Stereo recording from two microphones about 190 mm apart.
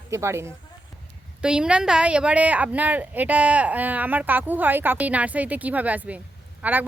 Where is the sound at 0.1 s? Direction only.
15° right (ahead or behind).